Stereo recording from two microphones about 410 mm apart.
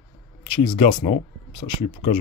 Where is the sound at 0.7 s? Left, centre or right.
Centre.